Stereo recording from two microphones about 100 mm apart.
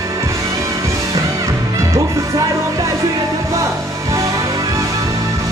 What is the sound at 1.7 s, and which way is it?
Music, 30° right (ahead or behind).